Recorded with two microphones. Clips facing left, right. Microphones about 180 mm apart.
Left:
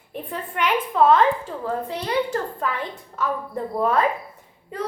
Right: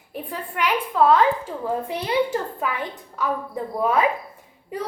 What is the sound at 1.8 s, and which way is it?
A woman's voice, 10° right (ahead or behind).